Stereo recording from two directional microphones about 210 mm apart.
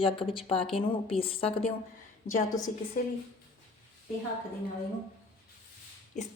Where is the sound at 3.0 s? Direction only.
45° left (ahead or behind).